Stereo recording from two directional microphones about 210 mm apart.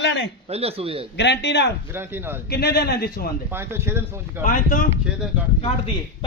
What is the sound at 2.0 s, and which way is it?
Speech, 10° right (ahead or behind).